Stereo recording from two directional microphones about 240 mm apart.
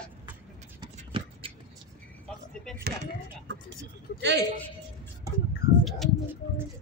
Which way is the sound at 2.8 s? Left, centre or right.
Right.